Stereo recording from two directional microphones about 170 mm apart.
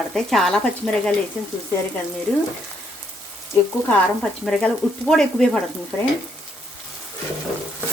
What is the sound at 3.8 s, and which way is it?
Frying, 5° left (ahead or behind).